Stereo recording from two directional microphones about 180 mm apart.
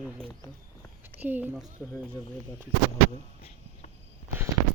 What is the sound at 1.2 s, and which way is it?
Speech, 10° right (ahead or behind).